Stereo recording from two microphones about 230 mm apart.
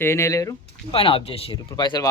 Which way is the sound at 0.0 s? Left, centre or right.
Centre.